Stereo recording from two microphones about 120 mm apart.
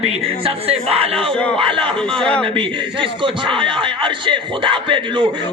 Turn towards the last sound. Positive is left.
turn(degrees=-40)  # may be behind; listen again after turning